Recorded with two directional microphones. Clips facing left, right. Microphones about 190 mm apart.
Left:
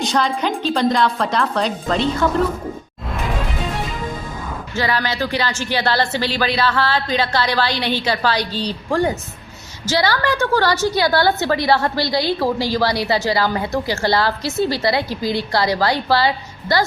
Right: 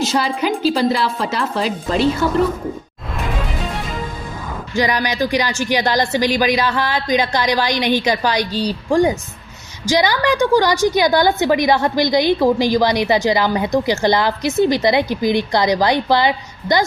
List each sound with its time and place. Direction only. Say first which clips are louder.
0.0 s a woman's voice: right 1 dB; centre (ahead or behind)
4.7 s a woman's voice: right 3 dB; 15° right (ahead or behind)